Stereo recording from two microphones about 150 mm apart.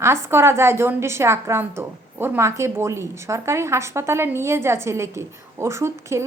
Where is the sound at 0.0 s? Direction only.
15° right (ahead or behind).